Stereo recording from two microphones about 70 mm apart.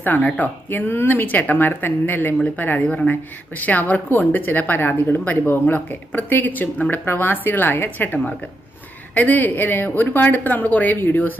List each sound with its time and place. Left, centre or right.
0.0 s speech: left